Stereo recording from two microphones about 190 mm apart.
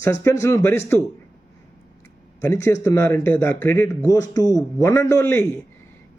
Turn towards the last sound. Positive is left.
turn(degrees=15)  # may be behind; listen again after turning